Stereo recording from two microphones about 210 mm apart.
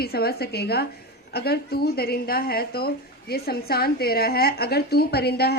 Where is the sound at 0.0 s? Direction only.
50° left (ahead or behind).